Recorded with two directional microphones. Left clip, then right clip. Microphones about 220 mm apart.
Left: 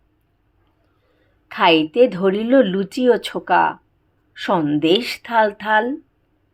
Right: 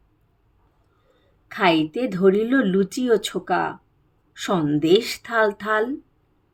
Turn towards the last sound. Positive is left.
turn(degrees=-5)  # may be behind; listen again after turning